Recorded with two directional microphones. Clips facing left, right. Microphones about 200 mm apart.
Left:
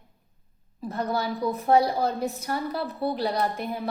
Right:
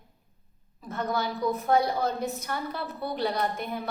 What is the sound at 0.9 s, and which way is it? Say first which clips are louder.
A woman's voice: left 2 dB; 35° left (ahead or behind).